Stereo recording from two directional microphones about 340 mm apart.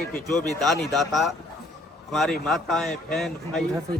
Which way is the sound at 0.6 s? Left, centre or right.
Centre.